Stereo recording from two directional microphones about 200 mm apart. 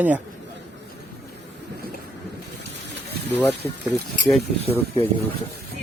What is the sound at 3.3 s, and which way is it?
Speech, 15° left (ahead or behind).